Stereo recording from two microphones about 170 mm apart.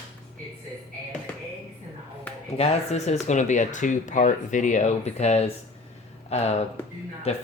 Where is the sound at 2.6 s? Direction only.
40° left (ahead or behind).